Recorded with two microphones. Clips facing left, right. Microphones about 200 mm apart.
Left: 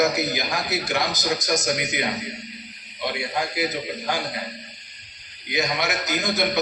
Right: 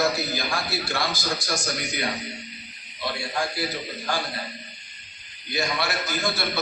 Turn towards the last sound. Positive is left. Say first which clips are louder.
# left 4 dB
turn(degrees=20)  # may be behind; listen again after turning